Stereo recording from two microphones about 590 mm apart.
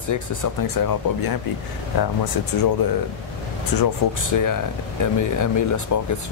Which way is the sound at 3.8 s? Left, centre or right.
Left.